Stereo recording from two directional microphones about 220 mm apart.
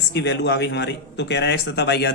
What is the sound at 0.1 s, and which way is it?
Speech, 50° left (ahead or behind).